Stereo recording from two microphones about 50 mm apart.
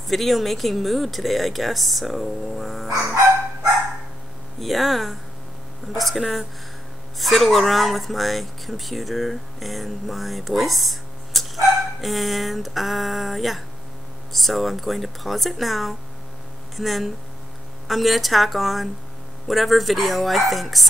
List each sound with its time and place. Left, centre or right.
0.1 s speech: centre
4.6 s speech: centre